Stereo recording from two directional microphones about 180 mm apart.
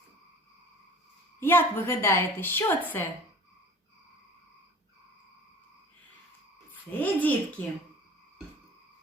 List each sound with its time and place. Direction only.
1.4 s a woman's voice: 10° left (ahead or behind)
7.0 s a woman's voice: 10° left (ahead or behind)